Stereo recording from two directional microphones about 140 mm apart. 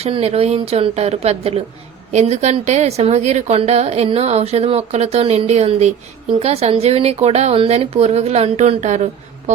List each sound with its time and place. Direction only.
0.0 s a woman's voice: 50° right (ahead or behind)